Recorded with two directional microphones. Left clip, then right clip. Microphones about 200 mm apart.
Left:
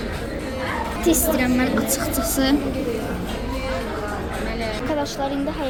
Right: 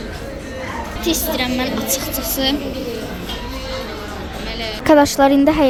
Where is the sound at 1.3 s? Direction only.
25° left (ahead or behind).